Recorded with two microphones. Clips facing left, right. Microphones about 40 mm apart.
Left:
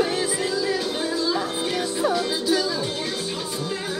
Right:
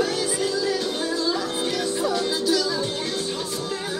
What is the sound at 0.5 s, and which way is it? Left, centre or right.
Music, centre.